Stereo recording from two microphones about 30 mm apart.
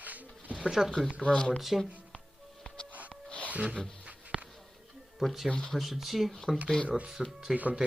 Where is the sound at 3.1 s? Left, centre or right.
Left.